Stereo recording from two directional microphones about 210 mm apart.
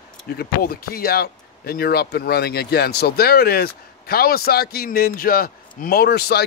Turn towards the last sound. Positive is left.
turn(degrees=50)  # may be behind; listen again after turning